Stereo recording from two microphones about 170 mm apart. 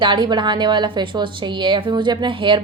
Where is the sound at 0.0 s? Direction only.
25° right (ahead or behind).